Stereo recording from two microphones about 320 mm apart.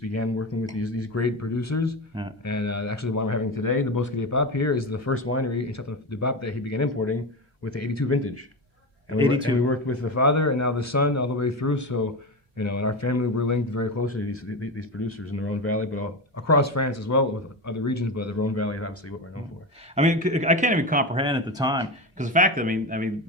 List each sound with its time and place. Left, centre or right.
0.0 s a man's voice: left
9.1 s speech: centre
9.6 s speech: left
14.0 s a man's voice: left
20.0 s speech: right
22.2 s speech: right